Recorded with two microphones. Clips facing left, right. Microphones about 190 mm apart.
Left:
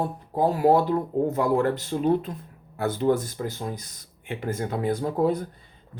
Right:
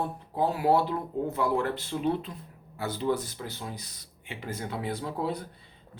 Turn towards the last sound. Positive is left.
turn(degrees=45)  # may be behind; listen again after turning